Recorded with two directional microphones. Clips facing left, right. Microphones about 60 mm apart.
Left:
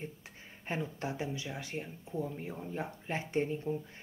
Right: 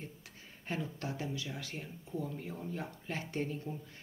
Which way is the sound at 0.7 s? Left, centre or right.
Left.